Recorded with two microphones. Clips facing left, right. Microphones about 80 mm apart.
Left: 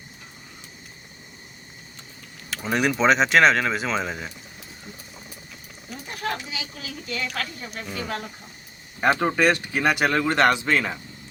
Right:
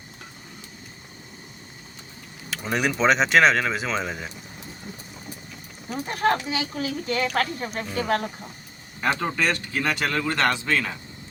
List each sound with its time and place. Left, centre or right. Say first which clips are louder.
2.6 s speech: left 1 dB; centre
5.9 s speech: right 7 dB; right
9.0 s a man's voice: left 4 dB; left